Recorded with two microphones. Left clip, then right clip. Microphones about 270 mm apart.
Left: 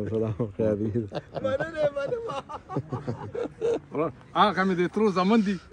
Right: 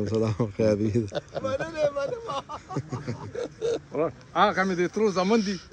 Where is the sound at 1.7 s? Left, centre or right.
Centre.